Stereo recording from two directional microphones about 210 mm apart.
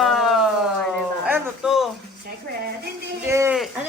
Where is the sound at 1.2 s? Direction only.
5° right (ahead or behind).